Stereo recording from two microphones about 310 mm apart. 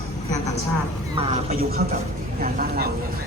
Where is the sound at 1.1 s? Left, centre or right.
Centre.